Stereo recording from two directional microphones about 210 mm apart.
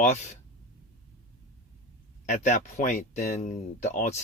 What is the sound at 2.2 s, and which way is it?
Speech, 35° left (ahead or behind).